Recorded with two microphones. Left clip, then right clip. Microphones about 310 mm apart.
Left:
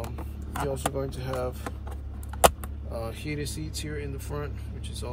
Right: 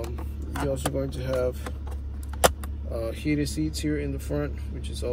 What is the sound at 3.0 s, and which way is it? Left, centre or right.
Speech, centre.